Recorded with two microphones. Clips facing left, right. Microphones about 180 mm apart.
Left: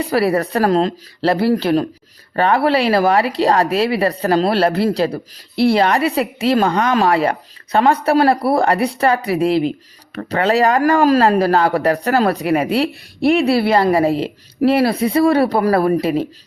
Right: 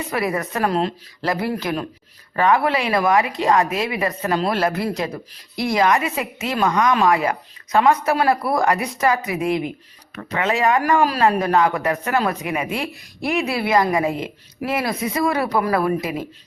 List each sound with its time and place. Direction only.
0.0 s speech: 35° left (ahead or behind)